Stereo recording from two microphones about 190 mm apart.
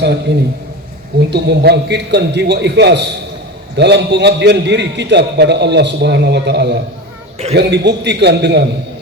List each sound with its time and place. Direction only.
0.0 s a man's voice: 65° right (ahead or behind)